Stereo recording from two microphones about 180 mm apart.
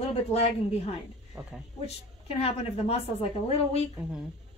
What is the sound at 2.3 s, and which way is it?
Speech, 35° left (ahead or behind).